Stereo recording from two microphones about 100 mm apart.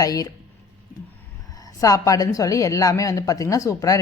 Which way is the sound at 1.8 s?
35° left (ahead or behind).